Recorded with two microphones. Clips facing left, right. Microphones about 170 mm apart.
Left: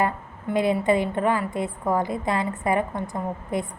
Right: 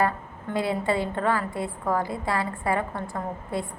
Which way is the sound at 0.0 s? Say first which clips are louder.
Left 1 dB; 20° left (ahead or behind).